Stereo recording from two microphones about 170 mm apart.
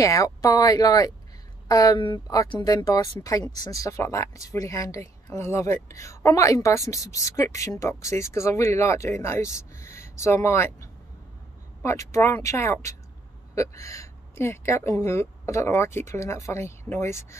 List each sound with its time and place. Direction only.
0.0 s speech: 20° left (ahead or behind)